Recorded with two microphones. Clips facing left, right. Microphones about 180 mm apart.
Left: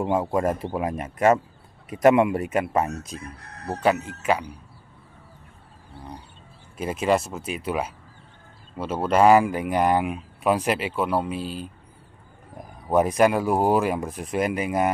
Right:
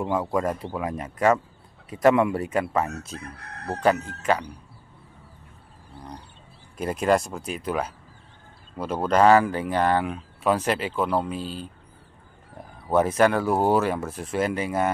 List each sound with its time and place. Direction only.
0.0 s speech: 25° left (ahead or behind); by 4.5 s 10° left (ahead or behind)
6.8 s speech: 5° left (ahead or behind)